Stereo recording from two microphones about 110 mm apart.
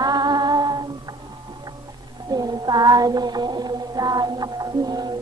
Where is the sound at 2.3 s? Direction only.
35° right (ahead or behind).